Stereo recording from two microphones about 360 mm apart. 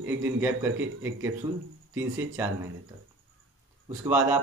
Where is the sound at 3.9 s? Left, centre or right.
Centre.